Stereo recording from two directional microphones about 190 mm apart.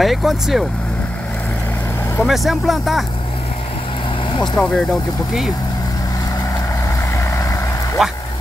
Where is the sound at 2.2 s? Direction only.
Centre (ahead or behind).